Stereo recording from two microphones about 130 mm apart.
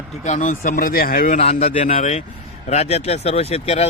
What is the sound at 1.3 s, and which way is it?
Speech, 55° left (ahead or behind).